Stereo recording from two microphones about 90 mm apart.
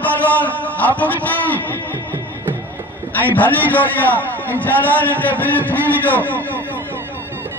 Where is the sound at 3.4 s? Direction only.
20° left (ahead or behind).